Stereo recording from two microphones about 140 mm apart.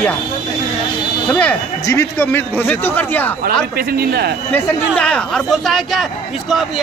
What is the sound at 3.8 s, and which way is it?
Speech, 90° right.